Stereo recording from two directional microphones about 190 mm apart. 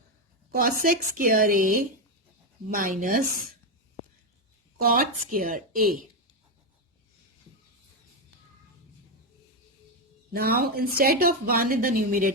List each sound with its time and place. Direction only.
0.5 s a woman's voice: 45° right (ahead or behind)
4.8 s a woman's voice: 50° right (ahead or behind)
10.3 s a woman's voice: 55° right (ahead or behind)